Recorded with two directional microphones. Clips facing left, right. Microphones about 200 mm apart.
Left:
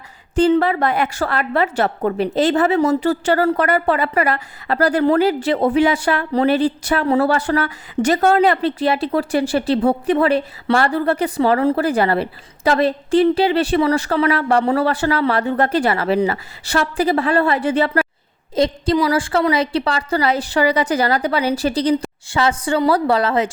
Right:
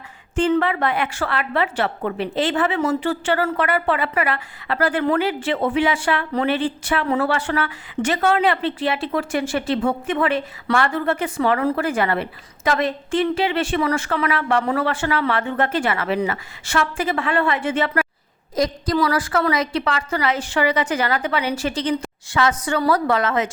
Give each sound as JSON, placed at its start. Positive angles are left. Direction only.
{"t": 0.3, "sound": "a woman's voice", "side_deg": 35}